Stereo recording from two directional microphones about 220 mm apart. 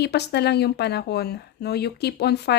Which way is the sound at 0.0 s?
50° left (ahead or behind).